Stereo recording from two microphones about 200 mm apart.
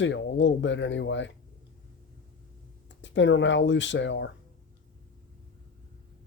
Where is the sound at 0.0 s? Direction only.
65° left (ahead or behind).